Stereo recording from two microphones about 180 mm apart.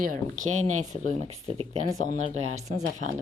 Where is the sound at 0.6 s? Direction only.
40° right (ahead or behind).